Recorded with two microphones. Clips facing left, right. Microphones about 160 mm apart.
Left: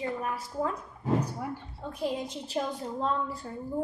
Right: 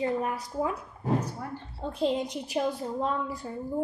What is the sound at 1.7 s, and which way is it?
A woman's voice, 30° right (ahead or behind).